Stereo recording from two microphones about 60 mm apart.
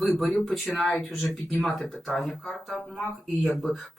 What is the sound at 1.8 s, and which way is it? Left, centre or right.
Speech, centre.